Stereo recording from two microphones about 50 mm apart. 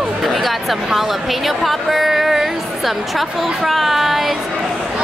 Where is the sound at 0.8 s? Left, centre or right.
Centre.